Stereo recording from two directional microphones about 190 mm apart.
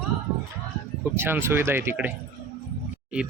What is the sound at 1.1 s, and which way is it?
Speech, 10° right (ahead or behind).